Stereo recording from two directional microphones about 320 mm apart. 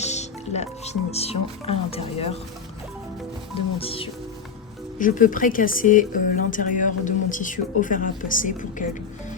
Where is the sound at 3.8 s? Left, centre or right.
Centre.